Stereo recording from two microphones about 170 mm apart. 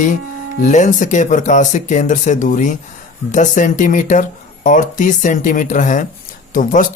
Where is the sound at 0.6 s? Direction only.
45° left (ahead or behind).